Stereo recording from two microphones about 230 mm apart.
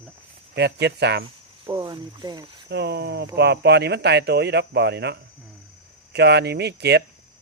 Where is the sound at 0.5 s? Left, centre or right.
Right.